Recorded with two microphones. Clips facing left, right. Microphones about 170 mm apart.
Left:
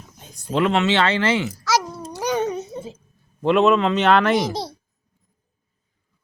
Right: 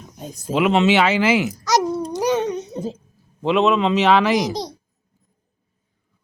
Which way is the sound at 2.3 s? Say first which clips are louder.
Left 2 dB; 5° left (ahead or behind).